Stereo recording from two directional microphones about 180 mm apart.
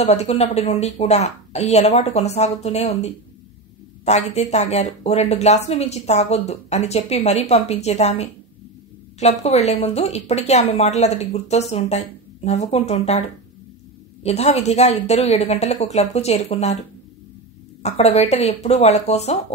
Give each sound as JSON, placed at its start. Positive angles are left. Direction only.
{"t": 0.0, "sound": "speech", "side_deg": 35}
{"t": 14.2, "sound": "speech", "side_deg": 35}
{"t": 17.8, "sound": "speech", "side_deg": 35}